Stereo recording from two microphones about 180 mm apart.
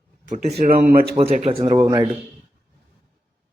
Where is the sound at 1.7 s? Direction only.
15° right (ahead or behind).